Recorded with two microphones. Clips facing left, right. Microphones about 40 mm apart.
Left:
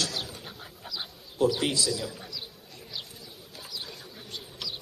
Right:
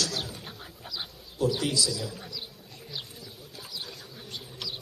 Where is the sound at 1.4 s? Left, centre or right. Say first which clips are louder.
Left 3 dB; left.